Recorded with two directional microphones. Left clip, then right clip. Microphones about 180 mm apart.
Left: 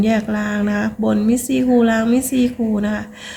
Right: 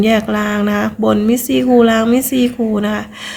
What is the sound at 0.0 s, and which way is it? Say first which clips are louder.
A woman's voice: right 5 dB; 20° right (ahead or behind).